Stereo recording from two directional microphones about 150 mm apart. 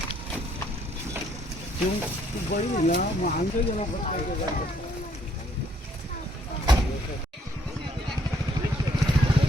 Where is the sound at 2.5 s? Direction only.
75° left (ahead or behind).